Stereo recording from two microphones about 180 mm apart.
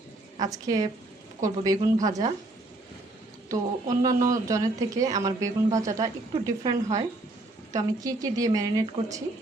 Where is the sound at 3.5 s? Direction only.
20° right (ahead or behind).